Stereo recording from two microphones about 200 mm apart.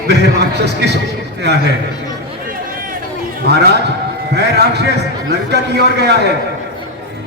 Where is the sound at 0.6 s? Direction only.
55° right (ahead or behind).